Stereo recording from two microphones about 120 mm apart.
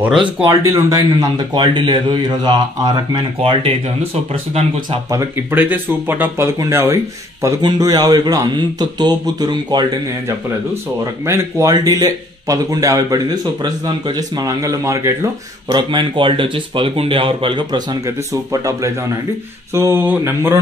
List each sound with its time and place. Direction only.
0.5 s speech: 25° right (ahead or behind)
3.3 s speech: 55° right (ahead or behind)
5.5 s speech: 15° right (ahead or behind)
7.6 s speech: 35° right (ahead or behind)
11.2 s speech: 25° right (ahead or behind)
15.7 s speech: 40° right (ahead or behind)
18.0 s speech: 30° right (ahead or behind)